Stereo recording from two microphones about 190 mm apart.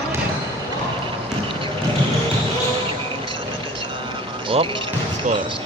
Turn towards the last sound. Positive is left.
turn(degrees=-25)  # may be behind; listen again after turning